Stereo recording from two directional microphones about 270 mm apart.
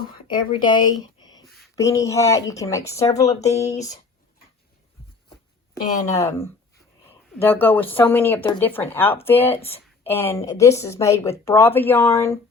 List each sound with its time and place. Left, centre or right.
0.1 s speech: centre
6.1 s a woman's voice: centre